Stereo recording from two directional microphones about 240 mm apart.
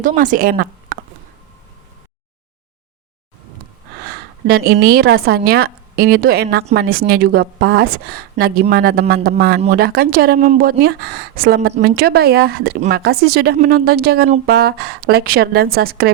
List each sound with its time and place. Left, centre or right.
0.0 s a woman's voice: right
4.4 s a woman's voice: right